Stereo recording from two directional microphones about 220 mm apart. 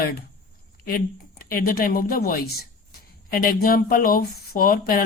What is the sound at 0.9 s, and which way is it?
A woman's voice, 40° left (ahead or behind).